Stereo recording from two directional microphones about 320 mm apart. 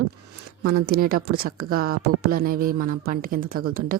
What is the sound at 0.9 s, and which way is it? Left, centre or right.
Speech, right.